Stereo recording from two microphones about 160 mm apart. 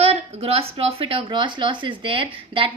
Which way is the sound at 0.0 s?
40° right (ahead or behind).